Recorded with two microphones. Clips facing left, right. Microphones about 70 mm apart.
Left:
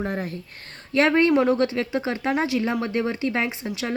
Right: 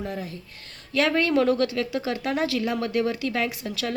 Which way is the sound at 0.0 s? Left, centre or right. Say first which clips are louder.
Left 4 dB; left.